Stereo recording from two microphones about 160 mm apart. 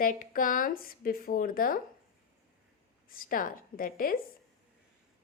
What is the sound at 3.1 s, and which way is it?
Speech, 60° left (ahead or behind).